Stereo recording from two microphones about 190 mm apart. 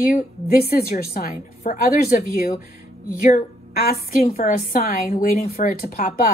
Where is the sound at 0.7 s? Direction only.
55° left (ahead or behind).